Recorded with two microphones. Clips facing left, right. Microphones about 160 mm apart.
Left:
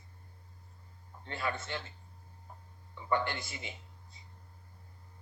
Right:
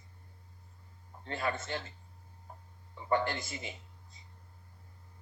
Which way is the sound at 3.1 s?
45° right (ahead or behind).